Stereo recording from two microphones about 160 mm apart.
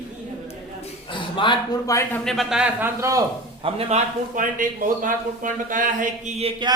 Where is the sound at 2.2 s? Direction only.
Centre (ahead or behind).